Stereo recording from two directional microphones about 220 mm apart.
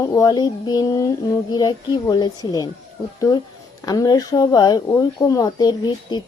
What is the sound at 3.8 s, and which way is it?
Speech, 15° left (ahead or behind).